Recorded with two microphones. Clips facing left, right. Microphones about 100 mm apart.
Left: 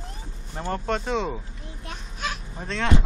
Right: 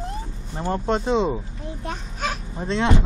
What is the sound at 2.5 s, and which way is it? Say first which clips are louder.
Speech: right 7 dB; 25° right (ahead or behind).